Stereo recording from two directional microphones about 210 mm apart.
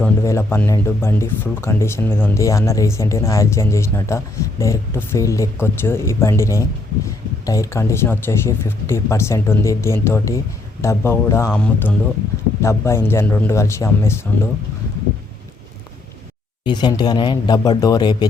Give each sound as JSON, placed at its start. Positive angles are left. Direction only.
{"t": 0.0, "sound": "speech", "side_deg": 10}
{"t": 16.6, "sound": "speech", "side_deg": 20}